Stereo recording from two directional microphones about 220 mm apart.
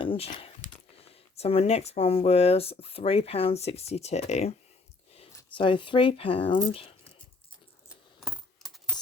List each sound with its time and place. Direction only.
0.0 s computer keyboard: 25° left (ahead or behind)
0.3 s speech: 25° left (ahead or behind)
7.9 s coin: centre (ahead or behind)